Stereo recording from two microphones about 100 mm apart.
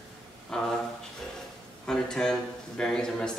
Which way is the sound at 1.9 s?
5° left (ahead or behind).